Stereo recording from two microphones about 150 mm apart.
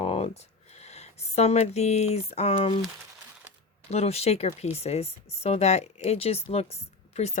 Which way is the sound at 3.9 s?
45° left (ahead or behind).